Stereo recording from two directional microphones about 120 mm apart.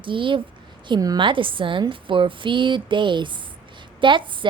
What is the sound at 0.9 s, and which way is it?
A woman's voice, 35° right (ahead or behind).